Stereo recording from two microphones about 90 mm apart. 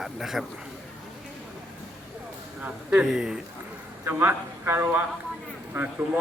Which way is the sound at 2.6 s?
15° right (ahead or behind).